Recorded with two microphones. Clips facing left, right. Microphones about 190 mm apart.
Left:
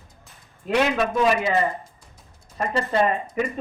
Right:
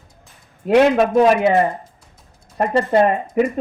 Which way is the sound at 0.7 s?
50° right (ahead or behind).